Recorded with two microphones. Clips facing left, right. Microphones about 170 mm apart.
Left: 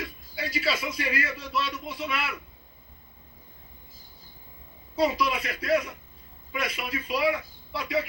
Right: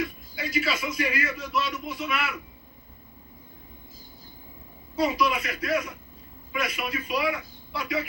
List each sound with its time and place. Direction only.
0.3 s a man's voice: 30° left (ahead or behind)
4.9 s a man's voice: 30° left (ahead or behind)